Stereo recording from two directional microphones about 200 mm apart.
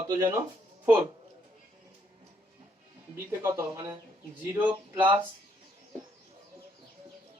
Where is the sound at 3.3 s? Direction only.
15° right (ahead or behind).